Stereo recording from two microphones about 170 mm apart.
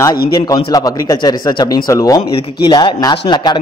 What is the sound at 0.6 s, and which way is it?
A man's voice, 20° left (ahead or behind).